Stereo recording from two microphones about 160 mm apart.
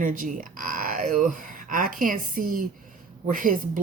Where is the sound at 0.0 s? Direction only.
55° right (ahead or behind).